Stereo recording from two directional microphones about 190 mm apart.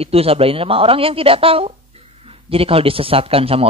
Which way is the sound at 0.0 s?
30° right (ahead or behind).